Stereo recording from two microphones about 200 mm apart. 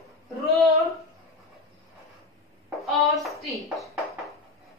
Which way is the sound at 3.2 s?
Centre (ahead or behind).